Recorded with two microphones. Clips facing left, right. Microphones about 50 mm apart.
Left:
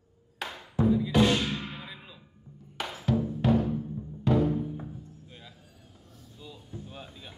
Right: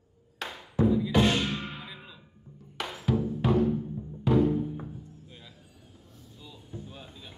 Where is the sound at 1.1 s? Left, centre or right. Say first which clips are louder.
Left 1 dB; right.